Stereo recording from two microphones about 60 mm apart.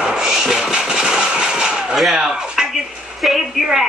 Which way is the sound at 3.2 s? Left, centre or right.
Centre.